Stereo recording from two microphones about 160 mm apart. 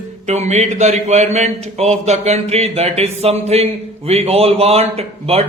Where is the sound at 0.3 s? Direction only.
45° right (ahead or behind).